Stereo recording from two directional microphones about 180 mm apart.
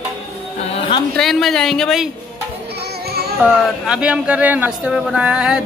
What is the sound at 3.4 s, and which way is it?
Speech, 5° right (ahead or behind).